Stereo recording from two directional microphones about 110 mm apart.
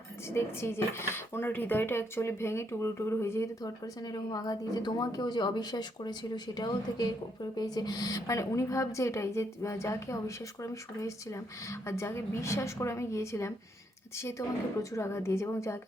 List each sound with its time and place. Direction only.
0.3 s a woman's voice: 25° left (ahead or behind)
3.6 s a woman's voice: 35° left (ahead or behind)